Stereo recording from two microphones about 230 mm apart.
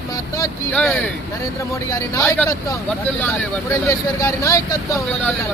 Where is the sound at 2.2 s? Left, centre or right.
Centre.